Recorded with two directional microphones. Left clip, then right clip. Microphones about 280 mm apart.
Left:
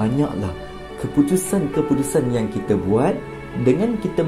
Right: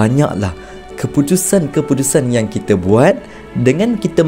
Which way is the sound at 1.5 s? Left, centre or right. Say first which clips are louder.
Right 6 dB; right.